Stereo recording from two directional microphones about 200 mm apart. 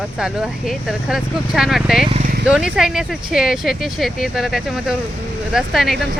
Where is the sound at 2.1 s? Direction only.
35° right (ahead or behind).